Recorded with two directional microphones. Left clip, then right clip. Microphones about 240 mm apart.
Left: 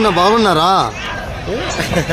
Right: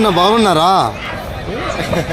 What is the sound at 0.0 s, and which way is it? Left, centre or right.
Speech, centre.